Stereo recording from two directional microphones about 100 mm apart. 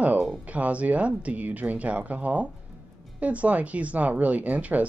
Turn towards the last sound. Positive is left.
turn(degrees=-15)  # may be behind; listen again after turning